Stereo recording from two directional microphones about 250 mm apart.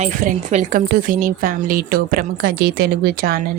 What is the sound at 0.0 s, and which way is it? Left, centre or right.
A woman's voice, right.